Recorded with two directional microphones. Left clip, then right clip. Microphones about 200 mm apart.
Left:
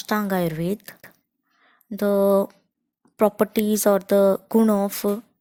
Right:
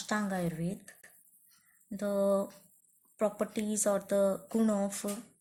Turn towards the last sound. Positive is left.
turn(degrees=40)  # may be behind; listen again after turning